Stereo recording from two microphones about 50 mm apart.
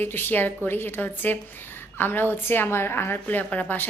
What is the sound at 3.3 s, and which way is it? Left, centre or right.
Speech, left.